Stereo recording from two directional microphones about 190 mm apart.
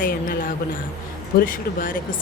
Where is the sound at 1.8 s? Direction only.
45° left (ahead or behind).